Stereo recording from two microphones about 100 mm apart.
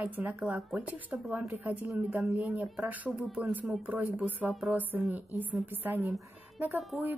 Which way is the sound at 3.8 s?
10° right (ahead or behind).